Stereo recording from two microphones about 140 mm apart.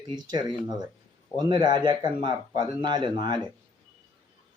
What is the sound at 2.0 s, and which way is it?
Speech, 50° left (ahead or behind).